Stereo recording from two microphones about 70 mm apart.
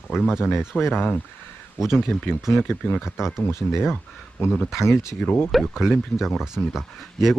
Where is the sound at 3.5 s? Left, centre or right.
Left.